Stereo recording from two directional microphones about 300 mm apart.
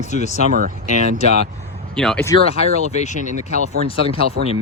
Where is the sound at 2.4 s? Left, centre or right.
Left.